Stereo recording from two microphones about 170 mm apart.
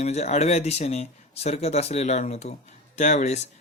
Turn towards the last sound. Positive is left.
turn(degrees=40)  # may be behind; listen again after turning